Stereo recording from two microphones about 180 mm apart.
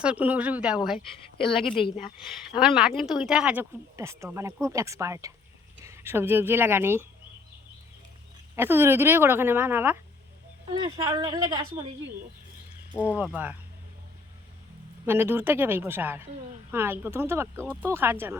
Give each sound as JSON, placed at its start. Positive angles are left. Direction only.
{"t": 0.0, "sound": "speech", "side_deg": -5}
{"t": 2.6, "sound": "speech", "side_deg": -5}
{"t": 8.5, "sound": "speech", "side_deg": -10}
{"t": 10.7, "sound": "speech", "side_deg": -20}
{"t": 12.9, "sound": "speech", "side_deg": -10}
{"t": 15.0, "sound": "speech", "side_deg": -10}